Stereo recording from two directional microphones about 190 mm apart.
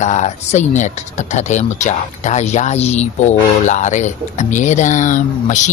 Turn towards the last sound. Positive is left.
turn(degrees=40)  # may be behind; listen again after turning